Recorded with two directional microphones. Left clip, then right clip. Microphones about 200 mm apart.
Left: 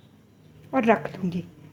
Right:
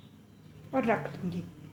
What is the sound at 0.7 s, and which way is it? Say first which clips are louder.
Speech: left 7 dB; 45° left (ahead or behind).